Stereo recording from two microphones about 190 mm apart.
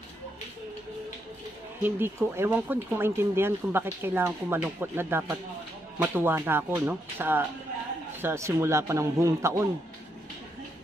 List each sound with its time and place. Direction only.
1.8 s speech: 10° right (ahead or behind)